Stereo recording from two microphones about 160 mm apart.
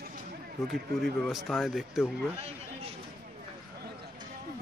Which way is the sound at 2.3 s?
40° right (ahead or behind).